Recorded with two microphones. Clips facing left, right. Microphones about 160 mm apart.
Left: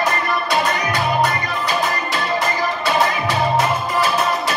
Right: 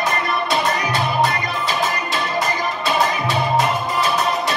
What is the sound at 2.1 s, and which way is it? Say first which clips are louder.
Music: left 1 dB; 20° right (ahead or behind).